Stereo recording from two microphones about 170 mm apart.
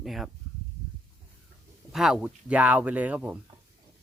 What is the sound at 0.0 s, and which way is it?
Speech, centre (ahead or behind).